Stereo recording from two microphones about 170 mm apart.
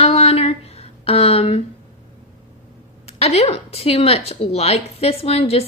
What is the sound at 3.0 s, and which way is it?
A woman's voice, 40° left (ahead or behind).